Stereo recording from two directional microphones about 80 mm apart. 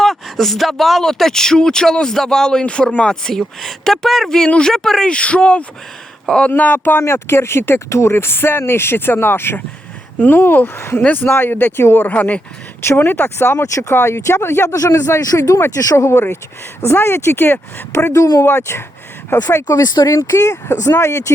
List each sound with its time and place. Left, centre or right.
0.0 s speech: centre
6.5 s speech: left
12.8 s speech: left
19.6 s speech: left